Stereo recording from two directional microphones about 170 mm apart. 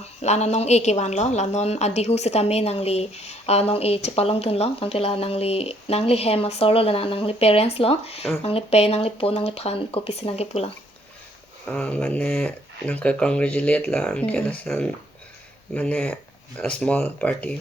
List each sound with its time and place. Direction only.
0.2 s a woman's voice: 40° left (ahead or behind)
11.7 s speech: 5° left (ahead or behind)